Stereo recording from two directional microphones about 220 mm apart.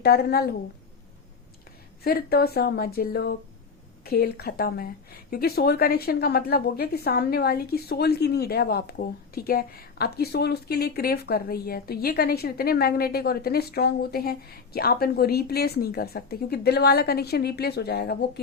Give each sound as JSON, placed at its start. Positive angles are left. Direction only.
{"t": 0.0, "sound": "speech", "side_deg": 45}
{"t": 2.0, "sound": "speech", "side_deg": 45}